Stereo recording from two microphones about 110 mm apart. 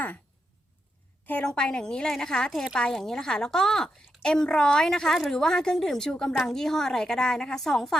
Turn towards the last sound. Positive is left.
turn(degrees=0)  # may be behind; listen again after turning